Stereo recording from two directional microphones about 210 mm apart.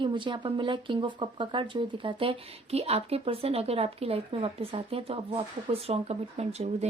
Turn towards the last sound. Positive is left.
turn(degrees=-30)  # may be behind; listen again after turning